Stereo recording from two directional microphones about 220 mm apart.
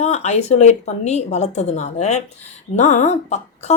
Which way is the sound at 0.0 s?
30° left (ahead or behind).